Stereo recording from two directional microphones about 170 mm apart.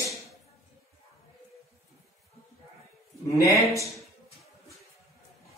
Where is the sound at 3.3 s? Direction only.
20° left (ahead or behind).